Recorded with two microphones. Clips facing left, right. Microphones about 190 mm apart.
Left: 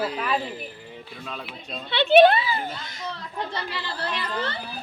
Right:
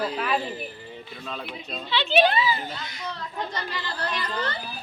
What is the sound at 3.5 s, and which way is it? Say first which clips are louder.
Speech: left 1 dB; 30° left (ahead or behind).